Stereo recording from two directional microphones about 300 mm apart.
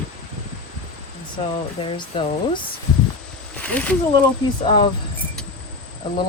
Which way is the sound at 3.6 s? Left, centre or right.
Centre.